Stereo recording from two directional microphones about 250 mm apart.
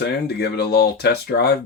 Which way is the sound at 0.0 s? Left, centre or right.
Left.